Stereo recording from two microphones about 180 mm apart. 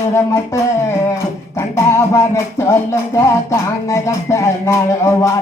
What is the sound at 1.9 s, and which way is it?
Music, 15° left (ahead or behind).